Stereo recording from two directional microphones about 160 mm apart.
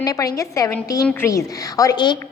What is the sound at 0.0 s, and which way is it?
A woman's voice, 20° left (ahead or behind).